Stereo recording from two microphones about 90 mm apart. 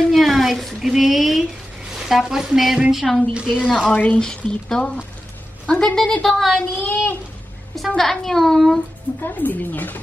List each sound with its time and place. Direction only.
0.0 s a child's voice: centre (ahead or behind)
3.6 s a child's voice: 5° left (ahead or behind)
3.9 s a woman's voice: 15° left (ahead or behind)
6.8 s speech: 20° left (ahead or behind)
7.7 s a child's voice: centre (ahead or behind)
9.2 s speech: 20° left (ahead or behind)